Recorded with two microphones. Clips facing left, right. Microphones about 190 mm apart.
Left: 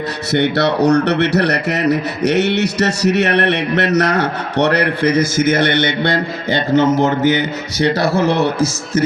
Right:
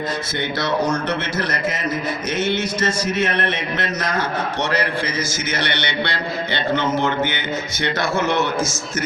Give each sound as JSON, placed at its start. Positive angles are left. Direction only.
{"t": 0.3, "sound": "a man's voice", "side_deg": 65}